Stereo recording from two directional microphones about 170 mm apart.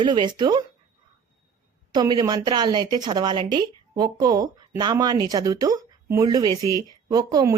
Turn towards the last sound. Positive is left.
turn(degrees=-20)  # may be behind; listen again after turning